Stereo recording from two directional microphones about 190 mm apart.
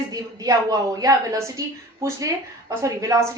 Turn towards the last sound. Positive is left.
turn(degrees=-15)  # may be behind; listen again after turning